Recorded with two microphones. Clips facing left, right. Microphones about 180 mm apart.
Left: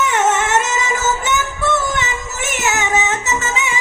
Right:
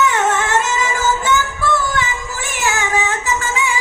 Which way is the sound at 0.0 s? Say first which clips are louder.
Even; 20° left (ahead or behind).